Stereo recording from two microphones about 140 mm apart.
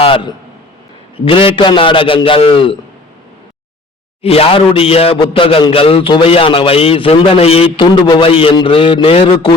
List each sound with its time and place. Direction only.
0.0 s a sound: 40° left (ahead or behind)
1.1 s a man's voice: 40° left (ahead or behind)
4.2 s a man's voice: 45° left (ahead or behind)